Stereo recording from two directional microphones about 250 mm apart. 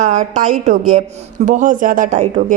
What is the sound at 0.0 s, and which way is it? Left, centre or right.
A woman's voice, right.